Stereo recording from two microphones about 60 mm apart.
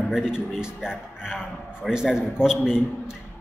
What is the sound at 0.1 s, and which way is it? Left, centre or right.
A man's voice, centre.